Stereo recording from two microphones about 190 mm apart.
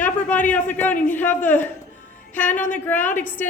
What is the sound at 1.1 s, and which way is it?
A woman's voice, 10° left (ahead or behind).